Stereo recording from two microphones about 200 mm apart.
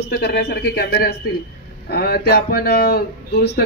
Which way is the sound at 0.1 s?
55° left (ahead or behind).